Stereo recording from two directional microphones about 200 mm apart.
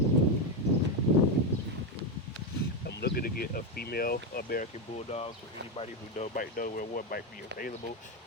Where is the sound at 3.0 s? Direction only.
50° left (ahead or behind).